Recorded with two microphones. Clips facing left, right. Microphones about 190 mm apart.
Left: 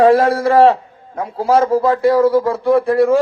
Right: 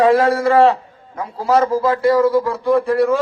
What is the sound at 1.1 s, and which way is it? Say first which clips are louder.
A man's voice: left 2 dB; 55° left (ahead or behind).